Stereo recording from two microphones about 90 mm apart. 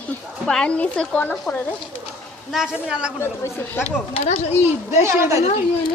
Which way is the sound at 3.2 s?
25° left (ahead or behind).